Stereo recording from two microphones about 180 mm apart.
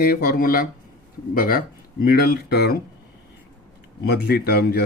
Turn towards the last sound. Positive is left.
turn(degrees=60)  # may be behind; listen again after turning